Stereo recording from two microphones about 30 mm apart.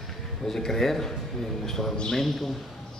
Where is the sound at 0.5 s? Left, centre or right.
Centre.